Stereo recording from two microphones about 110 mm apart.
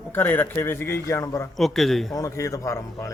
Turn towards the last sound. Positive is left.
turn(degrees=30)  # may be behind; listen again after turning